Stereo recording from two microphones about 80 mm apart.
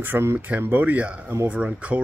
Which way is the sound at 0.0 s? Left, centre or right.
Right.